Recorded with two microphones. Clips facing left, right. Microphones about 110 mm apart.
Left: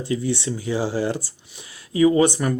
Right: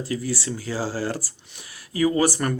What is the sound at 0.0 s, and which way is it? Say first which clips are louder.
Speech: left 4 dB; 25° left (ahead or behind).